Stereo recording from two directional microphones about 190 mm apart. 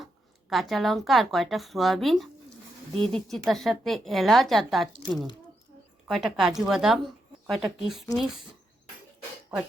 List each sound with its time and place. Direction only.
0.5 s a woman's voice: centre (ahead or behind)